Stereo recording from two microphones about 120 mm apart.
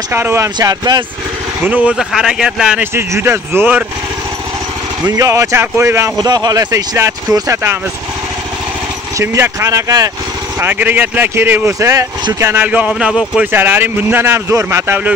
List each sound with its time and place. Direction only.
0.1 s speech: 20° right (ahead or behind)
0.6 s speech: 35° right (ahead or behind)
1.6 s speech: 10° right (ahead or behind)
2.8 s speech: 20° right (ahead or behind)
5.1 s speech: 25° right (ahead or behind)
9.2 s speech: 20° right (ahead or behind)
10.6 s speech: 15° right (ahead or behind)
13.5 s speech: 15° right (ahead or behind)